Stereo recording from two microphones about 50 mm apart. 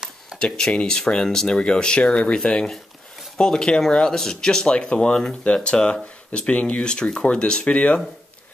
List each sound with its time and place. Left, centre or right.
0.4 s speech: centre